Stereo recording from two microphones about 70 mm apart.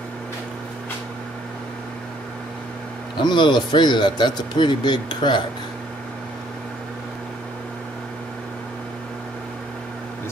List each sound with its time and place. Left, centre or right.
3.2 s speech: left